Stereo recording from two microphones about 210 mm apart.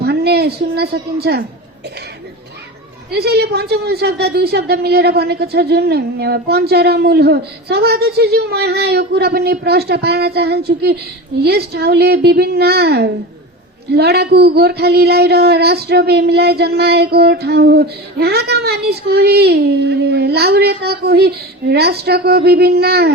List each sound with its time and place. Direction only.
0.0 s a woman's voice: 50° right (ahead or behind)
3.1 s a woman's voice: 50° right (ahead or behind)